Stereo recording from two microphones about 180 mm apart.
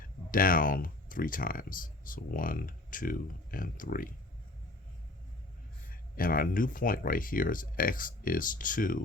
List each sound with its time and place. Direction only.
0.3 s speech: 50° left (ahead or behind)
5.9 s speech: 50° left (ahead or behind)